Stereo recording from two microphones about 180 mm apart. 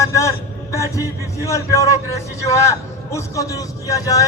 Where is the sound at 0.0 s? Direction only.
15° left (ahead or behind).